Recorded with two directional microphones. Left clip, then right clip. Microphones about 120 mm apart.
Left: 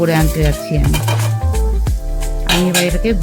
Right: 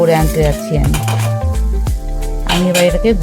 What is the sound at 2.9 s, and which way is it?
Music, 45° right (ahead or behind).